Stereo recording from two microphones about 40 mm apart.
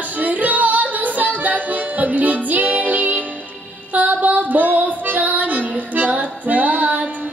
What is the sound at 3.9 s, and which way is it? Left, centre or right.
Music, right.